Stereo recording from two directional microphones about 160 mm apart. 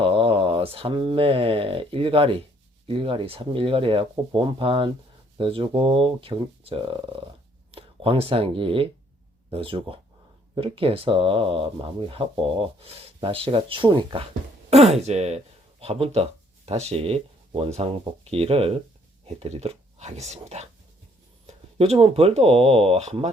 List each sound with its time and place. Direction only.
0.0 s speech: 35° right (ahead or behind)